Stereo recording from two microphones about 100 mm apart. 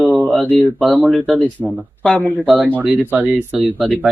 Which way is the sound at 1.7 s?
10° left (ahead or behind).